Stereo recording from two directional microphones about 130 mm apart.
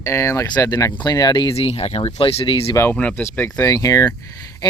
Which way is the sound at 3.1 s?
20° left (ahead or behind).